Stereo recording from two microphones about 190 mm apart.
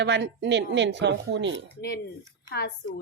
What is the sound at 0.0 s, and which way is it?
Speech, 65° right (ahead or behind).